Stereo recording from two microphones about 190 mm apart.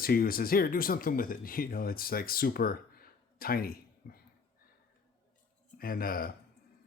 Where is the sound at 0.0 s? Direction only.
50° left (ahead or behind).